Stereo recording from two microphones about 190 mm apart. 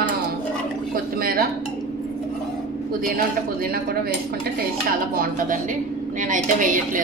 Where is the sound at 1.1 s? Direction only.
50° right (ahead or behind).